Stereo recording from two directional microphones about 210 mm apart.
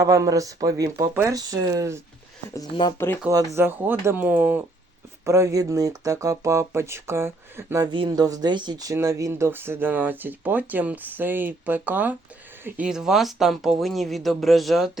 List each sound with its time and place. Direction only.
0.0 s speech: 15° right (ahead or behind)
2.5 s speech: 20° left (ahead or behind)
3.2 s speech: 10° right (ahead or behind)